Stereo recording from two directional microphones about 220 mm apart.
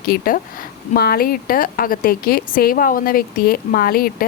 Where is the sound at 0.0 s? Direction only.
45° left (ahead or behind).